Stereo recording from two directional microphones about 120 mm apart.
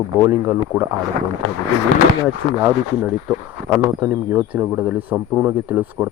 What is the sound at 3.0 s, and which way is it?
Speech, 10° right (ahead or behind).